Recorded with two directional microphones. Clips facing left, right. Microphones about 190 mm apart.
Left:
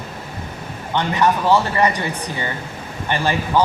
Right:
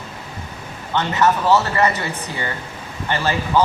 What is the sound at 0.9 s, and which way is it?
A man's voice, 15° left (ahead or behind).